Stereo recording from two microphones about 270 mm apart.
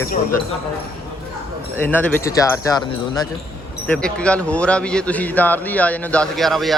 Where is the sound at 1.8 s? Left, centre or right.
Centre.